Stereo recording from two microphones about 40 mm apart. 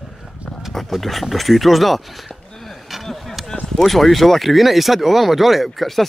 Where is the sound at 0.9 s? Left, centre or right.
Centre.